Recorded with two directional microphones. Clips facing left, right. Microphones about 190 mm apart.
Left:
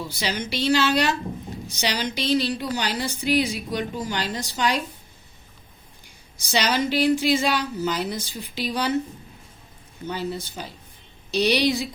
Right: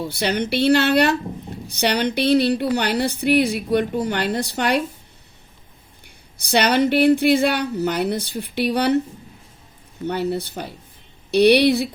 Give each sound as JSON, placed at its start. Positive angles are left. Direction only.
{"t": 0.0, "sound": "speech", "side_deg": -60}
{"t": 6.4, "sound": "speech", "side_deg": -60}
{"t": 10.1, "sound": "speech", "side_deg": -65}